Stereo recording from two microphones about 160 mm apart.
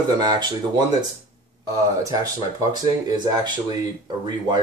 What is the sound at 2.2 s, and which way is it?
Speech, 25° right (ahead or behind).